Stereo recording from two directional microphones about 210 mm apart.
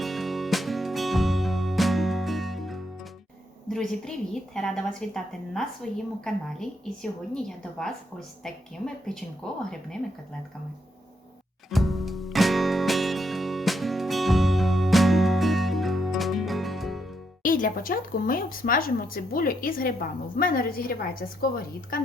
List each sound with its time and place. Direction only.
0.0 s music: centre (ahead or behind)
3.7 s a woman's voice: 5° left (ahead or behind)
9.4 s a woman's voice: 5° left (ahead or behind)
11.7 s music: centre (ahead or behind)
17.4 s a woman's voice: 40° left (ahead or behind)